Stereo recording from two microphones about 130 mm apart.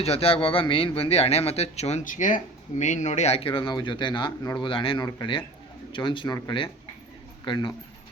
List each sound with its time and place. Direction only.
0.0 s speech: 50° left (ahead or behind); by 7.7 s 35° left (ahead or behind)